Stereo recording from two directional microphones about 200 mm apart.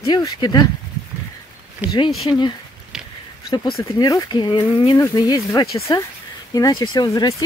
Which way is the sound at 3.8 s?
20° left (ahead or behind).